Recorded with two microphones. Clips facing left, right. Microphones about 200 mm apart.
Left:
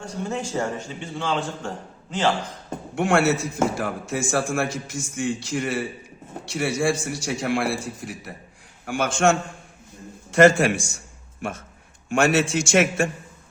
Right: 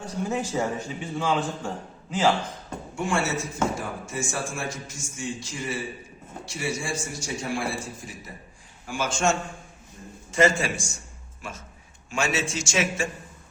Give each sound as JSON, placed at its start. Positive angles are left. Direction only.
{"t": 0.3, "sound": "a man's voice", "side_deg": -5}
{"t": 2.9, "sound": "a man's voice", "side_deg": 70}
{"t": 12.0, "sound": "a man's voice", "side_deg": 60}